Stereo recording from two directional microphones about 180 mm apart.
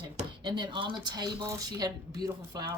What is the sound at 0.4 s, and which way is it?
Speech, 25° right (ahead or behind).